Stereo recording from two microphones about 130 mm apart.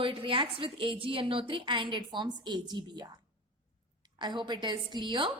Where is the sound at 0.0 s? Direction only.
40° right (ahead or behind).